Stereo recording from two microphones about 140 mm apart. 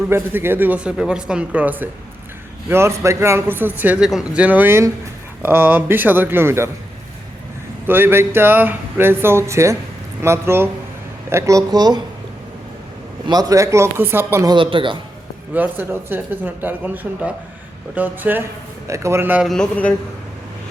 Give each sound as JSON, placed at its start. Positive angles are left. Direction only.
{"t": 0.1, "sound": "speech", "side_deg": -15}
{"t": 7.9, "sound": "a man's voice", "side_deg": -15}
{"t": 13.2, "sound": "a man's voice", "side_deg": -30}
{"t": 14.4, "sound": "speech", "side_deg": -35}
{"t": 15.5, "sound": "speech", "side_deg": -15}
{"t": 19.5, "sound": "speech", "side_deg": 5}